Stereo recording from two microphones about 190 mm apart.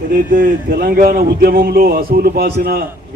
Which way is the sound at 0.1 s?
45° right (ahead or behind).